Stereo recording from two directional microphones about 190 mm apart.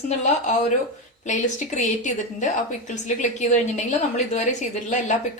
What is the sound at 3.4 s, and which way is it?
Speech, 40° left (ahead or behind).